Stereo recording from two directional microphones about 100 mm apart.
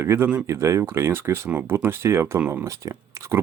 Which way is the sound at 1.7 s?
25° right (ahead or behind).